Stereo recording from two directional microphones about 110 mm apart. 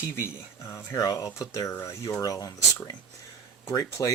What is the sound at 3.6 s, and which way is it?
Speech, 30° left (ahead or behind).